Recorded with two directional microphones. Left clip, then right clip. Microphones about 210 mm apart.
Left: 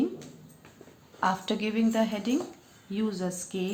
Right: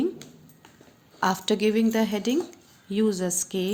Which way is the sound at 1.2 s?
50° right (ahead or behind).